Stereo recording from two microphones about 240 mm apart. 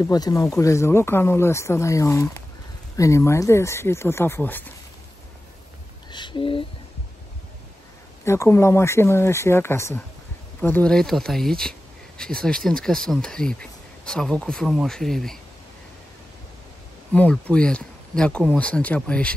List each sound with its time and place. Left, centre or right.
0.0 s speech: centre
6.1 s a sound: centre
8.3 s speech: centre
17.1 s speech: centre